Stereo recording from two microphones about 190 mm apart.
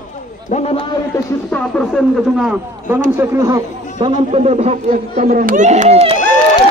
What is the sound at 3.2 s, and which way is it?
Speech, 15° right (ahead or behind).